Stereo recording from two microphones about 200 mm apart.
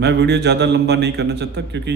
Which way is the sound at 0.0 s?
55° right (ahead or behind).